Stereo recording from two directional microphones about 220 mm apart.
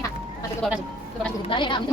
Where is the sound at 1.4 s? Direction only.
20° left (ahead or behind).